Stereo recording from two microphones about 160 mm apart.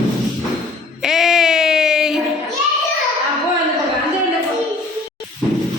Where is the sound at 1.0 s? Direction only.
Centre (ahead or behind).